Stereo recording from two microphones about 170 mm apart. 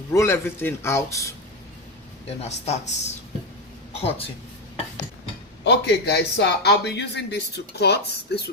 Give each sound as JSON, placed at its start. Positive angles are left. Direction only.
{"t": 0.1, "sound": "a man's voice", "side_deg": 15}
{"t": 2.4, "sound": "speech", "side_deg": 40}
{"t": 5.6, "sound": "speech", "side_deg": 75}